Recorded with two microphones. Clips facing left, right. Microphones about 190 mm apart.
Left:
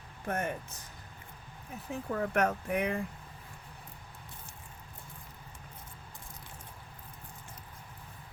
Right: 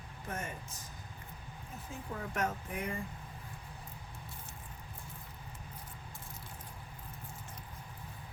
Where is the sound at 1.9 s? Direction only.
65° left (ahead or behind).